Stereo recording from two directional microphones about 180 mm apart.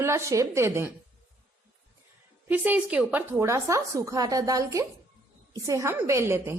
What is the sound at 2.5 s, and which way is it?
A woman's voice, 10° right (ahead or behind).